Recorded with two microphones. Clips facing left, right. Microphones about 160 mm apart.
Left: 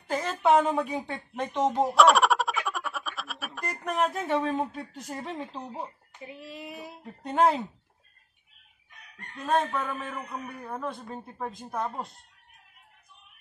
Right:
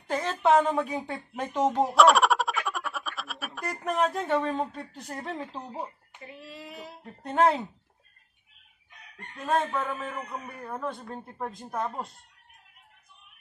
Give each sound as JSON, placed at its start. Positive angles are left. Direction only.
{"t": 0.1, "sound": "a woman's voice", "side_deg": 0}
{"t": 6.2, "sound": "a sound", "side_deg": 15}
{"t": 7.0, "sound": "a man's voice", "side_deg": 0}
{"t": 9.7, "sound": "a man's voice", "side_deg": 0}